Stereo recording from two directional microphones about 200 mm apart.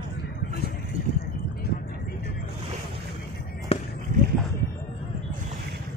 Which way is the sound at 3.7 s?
30° left (ahead or behind).